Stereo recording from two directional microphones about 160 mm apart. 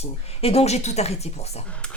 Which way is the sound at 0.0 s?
40° left (ahead or behind).